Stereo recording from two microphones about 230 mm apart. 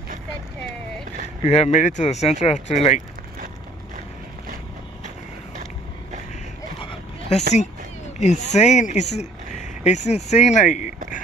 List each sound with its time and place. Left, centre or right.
1.4 s speech: left
6.8 s a sound: left
8.2 s speech: left